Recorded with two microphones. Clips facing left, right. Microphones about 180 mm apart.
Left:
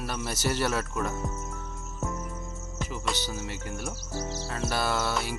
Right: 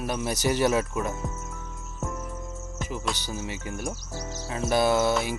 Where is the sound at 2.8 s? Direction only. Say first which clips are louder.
Right 2 dB; 20° right (ahead or behind).